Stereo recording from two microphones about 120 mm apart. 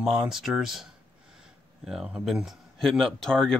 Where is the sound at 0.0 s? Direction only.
5° right (ahead or behind).